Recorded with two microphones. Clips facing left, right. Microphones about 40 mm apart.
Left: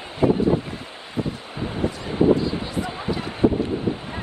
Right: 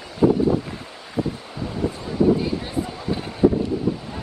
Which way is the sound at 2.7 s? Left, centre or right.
Left.